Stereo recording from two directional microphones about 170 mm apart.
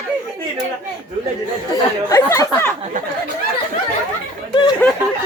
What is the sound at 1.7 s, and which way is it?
Speech, 20° left (ahead or behind).